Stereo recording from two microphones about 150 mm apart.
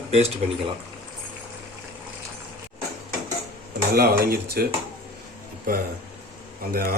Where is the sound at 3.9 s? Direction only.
90° right.